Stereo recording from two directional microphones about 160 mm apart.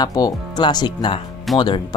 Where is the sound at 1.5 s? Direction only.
Centre (ahead or behind).